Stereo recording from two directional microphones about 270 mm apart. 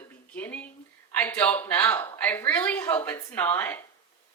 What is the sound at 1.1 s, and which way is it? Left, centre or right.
Speech, centre.